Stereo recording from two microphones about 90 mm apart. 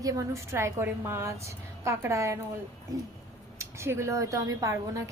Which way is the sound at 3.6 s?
30° right (ahead or behind).